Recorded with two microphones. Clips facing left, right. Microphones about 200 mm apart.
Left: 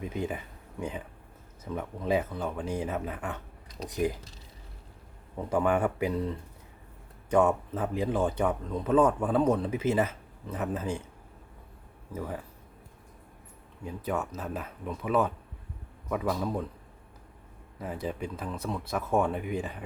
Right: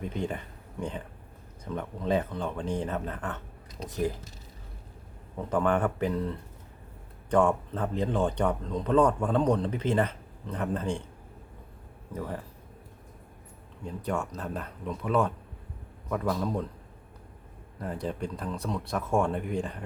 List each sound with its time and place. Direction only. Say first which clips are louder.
0.0 s speech: even; 5° left (ahead or behind)
5.5 s speech: even; 10° left (ahead or behind)
12.1 s speech: even; 5° left (ahead or behind)
13.8 s speech: even; 5° left (ahead or behind)
17.7 s speech: right 1 dB; 5° left (ahead or behind)